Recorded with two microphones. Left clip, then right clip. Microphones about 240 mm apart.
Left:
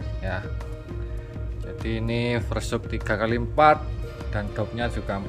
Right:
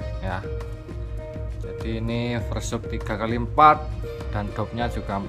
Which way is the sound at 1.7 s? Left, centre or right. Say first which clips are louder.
Left 1 dB; centre.